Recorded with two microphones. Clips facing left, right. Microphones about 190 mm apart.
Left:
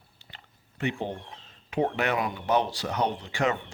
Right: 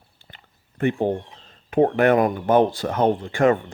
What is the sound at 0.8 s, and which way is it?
Speech, 50° right (ahead or behind).